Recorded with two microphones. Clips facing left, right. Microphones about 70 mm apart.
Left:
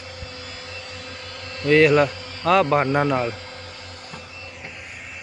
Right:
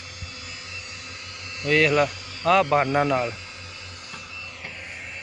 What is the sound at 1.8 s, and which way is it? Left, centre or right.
A man's voice, left.